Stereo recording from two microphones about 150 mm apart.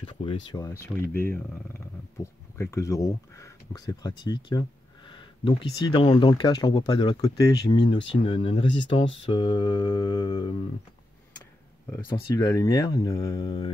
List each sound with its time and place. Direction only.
0.0 s speech: 35° left (ahead or behind)
0.6 s speech: 20° left (ahead or behind)
12.1 s speech: 25° left (ahead or behind)